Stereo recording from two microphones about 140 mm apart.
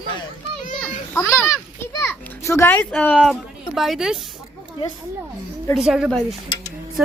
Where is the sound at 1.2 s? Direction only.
20° left (ahead or behind).